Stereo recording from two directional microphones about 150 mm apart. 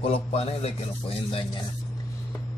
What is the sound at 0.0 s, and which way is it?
A man's voice, 40° left (ahead or behind).